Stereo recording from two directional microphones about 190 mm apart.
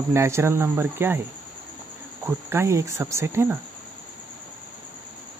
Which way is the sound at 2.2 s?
15° right (ahead or behind).